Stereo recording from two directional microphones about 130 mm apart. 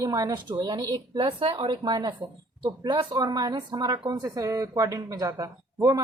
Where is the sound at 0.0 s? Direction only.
25° right (ahead or behind).